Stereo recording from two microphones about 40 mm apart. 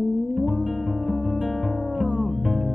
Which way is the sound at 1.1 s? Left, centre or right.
Left.